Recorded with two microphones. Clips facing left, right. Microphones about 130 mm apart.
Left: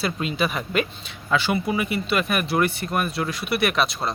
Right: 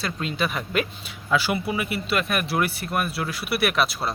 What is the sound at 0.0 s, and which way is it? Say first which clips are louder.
Speech: left 2 dB; 5° left (ahead or behind).